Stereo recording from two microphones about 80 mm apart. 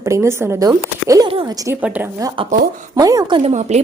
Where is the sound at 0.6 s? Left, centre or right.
Right.